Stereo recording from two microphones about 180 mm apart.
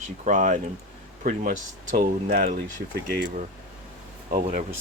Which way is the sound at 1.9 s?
55° right (ahead or behind).